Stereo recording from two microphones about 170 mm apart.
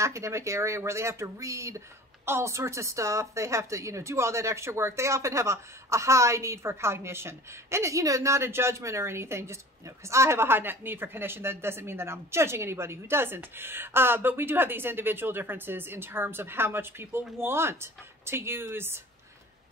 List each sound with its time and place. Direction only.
0.0 s a woman's voice: 15° right (ahead or behind)